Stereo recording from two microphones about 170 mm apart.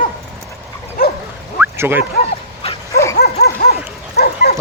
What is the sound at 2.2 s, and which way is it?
Bow-wow, 35° left (ahead or behind).